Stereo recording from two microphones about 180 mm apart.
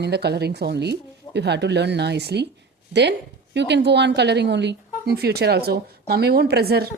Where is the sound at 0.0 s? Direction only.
65° right (ahead or behind).